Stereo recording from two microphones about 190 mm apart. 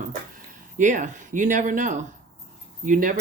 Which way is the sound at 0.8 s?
40° right (ahead or behind).